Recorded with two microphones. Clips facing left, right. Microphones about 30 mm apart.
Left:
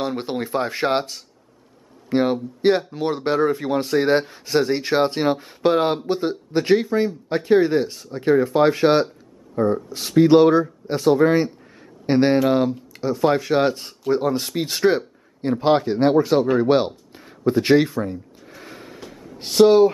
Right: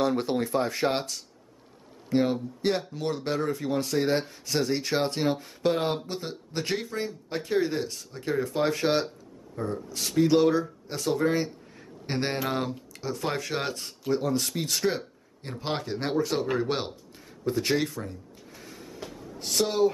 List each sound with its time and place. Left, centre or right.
0.0 s speech: centre
12.4 s speech: centre
17.5 s a sound: left
19.3 s speech: left